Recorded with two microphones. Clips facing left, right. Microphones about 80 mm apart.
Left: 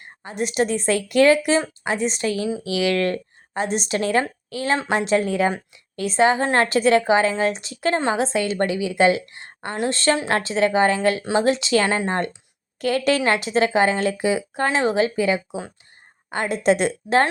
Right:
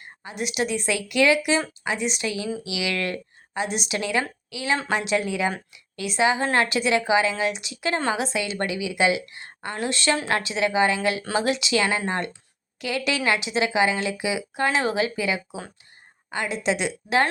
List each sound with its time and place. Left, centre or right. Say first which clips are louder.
0.0 s a woman's voice: left 4 dB; left
16.3 s a woman's voice: left 6 dB; left